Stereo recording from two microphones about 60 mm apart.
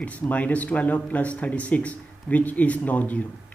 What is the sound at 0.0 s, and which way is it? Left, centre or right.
Speech, left.